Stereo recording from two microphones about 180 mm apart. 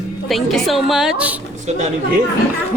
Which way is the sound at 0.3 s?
Centre (ahead or behind).